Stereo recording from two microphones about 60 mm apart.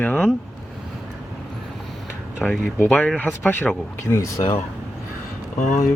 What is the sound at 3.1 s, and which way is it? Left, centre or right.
Speech, left.